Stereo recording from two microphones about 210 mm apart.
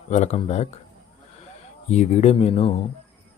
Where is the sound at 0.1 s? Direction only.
35° left (ahead or behind).